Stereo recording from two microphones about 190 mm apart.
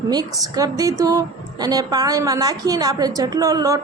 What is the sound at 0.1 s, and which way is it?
A woman's voice, 20° right (ahead or behind).